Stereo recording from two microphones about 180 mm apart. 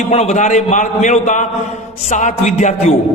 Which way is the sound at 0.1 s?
35° left (ahead or behind).